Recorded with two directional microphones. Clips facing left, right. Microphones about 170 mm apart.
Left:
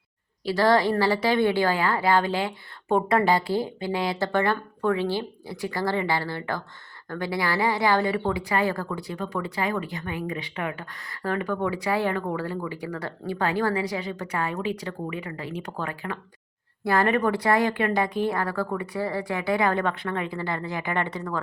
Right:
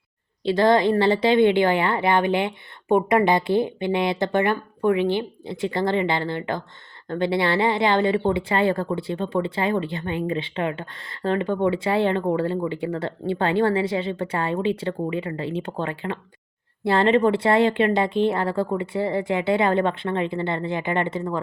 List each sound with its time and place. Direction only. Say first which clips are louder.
0.4 s speech: right 3 dB; 20° right (ahead or behind)